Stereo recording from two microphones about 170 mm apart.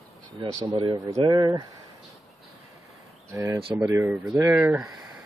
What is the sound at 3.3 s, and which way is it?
Speech, 20° right (ahead or behind).